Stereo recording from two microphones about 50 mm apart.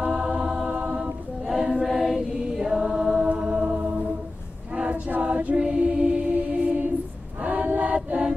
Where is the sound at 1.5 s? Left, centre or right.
Centre.